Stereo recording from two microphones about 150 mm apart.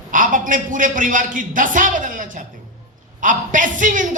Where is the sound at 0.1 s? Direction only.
60° right (ahead or behind).